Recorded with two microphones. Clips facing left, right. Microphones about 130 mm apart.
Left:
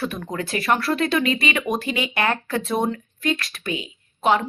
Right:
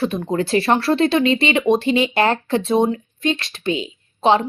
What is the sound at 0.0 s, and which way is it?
Speech, 25° right (ahead or behind).